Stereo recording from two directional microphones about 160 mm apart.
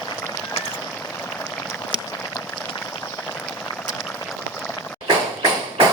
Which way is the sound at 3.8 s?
20° left (ahead or behind).